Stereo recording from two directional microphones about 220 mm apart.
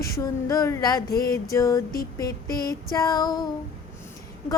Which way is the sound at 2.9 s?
15° left (ahead or behind).